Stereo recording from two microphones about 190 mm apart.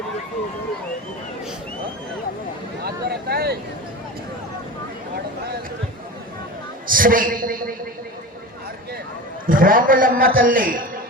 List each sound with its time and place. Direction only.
2.8 s a sound: 55° right (ahead or behind)
6.8 s a man's voice: 45° right (ahead or behind)
9.5 s a man's voice: 45° right (ahead or behind)